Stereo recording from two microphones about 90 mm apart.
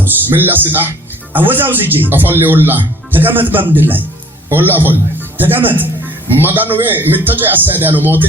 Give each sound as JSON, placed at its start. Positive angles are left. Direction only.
{"t": 0.0, "sound": "speech", "side_deg": -20}